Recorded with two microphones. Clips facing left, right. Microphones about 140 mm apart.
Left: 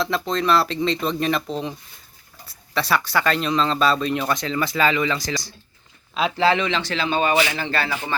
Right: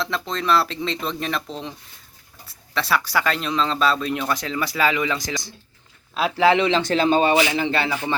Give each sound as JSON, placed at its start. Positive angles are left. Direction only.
{"t": 0.0, "sound": "speech", "side_deg": 0}
{"t": 2.7, "sound": "speech", "side_deg": 0}
{"t": 6.1, "sound": "speech", "side_deg": -5}
{"t": 6.5, "sound": "speech", "side_deg": -30}
{"t": 6.8, "sound": "speech", "side_deg": -45}
{"t": 7.3, "sound": "speech", "side_deg": -15}